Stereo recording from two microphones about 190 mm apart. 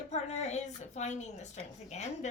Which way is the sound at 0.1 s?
35° left (ahead or behind).